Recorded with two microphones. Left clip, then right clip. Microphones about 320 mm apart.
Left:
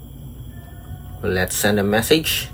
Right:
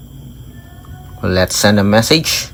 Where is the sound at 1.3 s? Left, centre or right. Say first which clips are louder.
Right 7 dB; centre.